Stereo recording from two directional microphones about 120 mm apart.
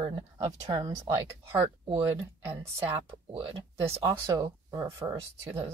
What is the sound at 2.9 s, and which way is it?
Speech, 50° right (ahead or behind).